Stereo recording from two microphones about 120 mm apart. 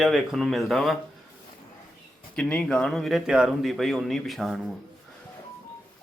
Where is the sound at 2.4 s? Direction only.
10° left (ahead or behind).